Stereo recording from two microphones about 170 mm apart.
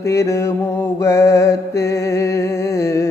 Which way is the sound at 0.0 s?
15° left (ahead or behind).